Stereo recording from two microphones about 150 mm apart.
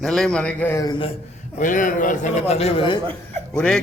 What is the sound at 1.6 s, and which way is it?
A man's voice, 65° left (ahead or behind).